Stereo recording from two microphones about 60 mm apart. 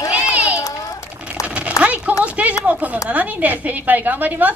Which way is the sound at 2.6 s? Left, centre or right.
Right.